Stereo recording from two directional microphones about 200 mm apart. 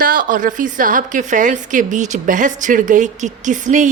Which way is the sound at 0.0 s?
45° right (ahead or behind).